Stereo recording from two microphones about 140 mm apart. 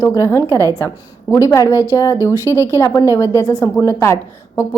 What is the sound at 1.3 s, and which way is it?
Speech, 20° left (ahead or behind).